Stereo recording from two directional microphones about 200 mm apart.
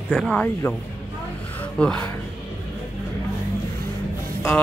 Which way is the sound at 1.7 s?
5° left (ahead or behind).